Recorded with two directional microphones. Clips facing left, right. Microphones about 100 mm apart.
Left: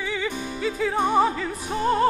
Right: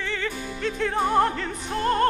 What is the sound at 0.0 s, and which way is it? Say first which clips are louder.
Music: left 2 dB; 10° left (ahead or behind).